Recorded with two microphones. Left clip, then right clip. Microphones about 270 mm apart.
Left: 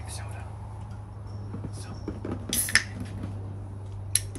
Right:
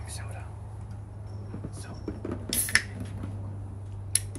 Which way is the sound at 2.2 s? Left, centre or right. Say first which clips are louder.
Left 2 dB; centre.